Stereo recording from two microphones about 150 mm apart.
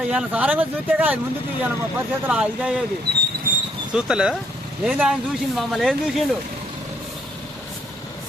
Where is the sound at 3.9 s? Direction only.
5° right (ahead or behind).